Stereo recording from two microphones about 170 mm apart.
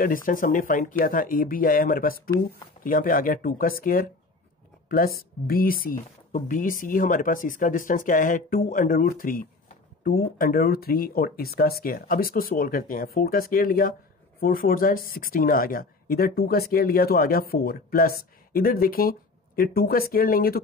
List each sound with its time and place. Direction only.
0.0 s speech: 55° left (ahead or behind)